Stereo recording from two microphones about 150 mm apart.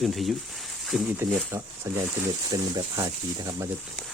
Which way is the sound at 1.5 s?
20° right (ahead or behind).